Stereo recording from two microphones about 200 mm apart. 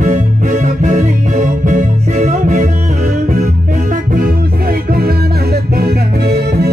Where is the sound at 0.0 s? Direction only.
40° right (ahead or behind).